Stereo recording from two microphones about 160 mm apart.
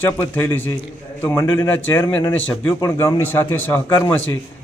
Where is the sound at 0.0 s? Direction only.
10° left (ahead or behind).